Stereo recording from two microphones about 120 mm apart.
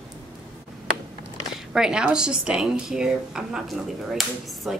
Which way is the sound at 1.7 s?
5° right (ahead or behind).